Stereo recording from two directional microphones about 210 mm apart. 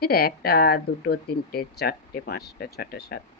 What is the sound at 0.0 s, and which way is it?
Speech, 45° left (ahead or behind).